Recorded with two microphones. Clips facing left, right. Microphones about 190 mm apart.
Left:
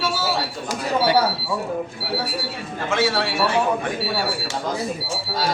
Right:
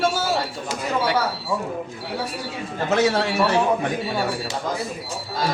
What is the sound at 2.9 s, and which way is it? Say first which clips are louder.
Speech: right 2 dB; 40° right (ahead or behind).